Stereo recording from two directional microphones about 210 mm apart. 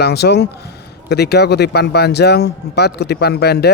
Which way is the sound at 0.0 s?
50° left (ahead or behind).